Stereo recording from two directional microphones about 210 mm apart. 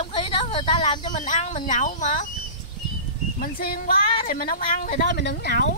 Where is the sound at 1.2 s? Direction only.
35° left (ahead or behind).